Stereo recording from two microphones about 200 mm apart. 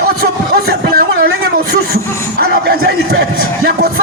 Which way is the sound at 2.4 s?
50° right (ahead or behind).